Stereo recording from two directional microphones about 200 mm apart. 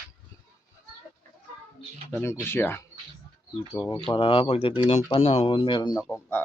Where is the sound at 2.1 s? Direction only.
10° left (ahead or behind).